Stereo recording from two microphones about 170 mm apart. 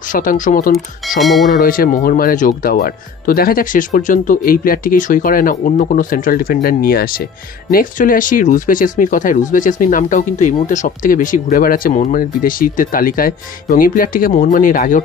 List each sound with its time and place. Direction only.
0.1 s speech: 50° left (ahead or behind)
1.2 s speech: centre (ahead or behind)
1.5 s speech: 55° left (ahead or behind)